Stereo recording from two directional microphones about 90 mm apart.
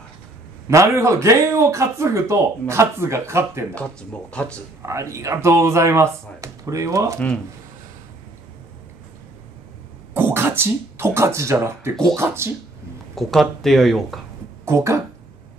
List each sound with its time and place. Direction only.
0.7 s speech: 35° right (ahead or behind)
3.7 s speech: 10° left (ahead or behind)
4.8 s speech: 35° right (ahead or behind)
10.1 s speech: 25° right (ahead or behind)
13.1 s speech: centre (ahead or behind)
14.6 s speech: 35° right (ahead or behind)